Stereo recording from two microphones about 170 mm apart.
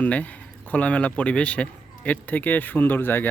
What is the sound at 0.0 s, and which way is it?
A man's voice, 10° left (ahead or behind).